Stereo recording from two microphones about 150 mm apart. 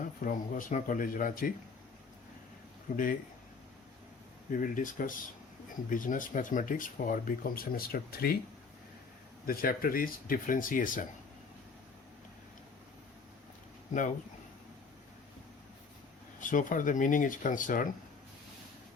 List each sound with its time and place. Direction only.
0.0 s speech: 60° left (ahead or behind)
2.9 s speech: 65° left (ahead or behind)
4.5 s speech: 60° left (ahead or behind); by 8.4 s 90° left
9.5 s speech: 75° left (ahead or behind)
16.4 s speech: 60° left (ahead or behind)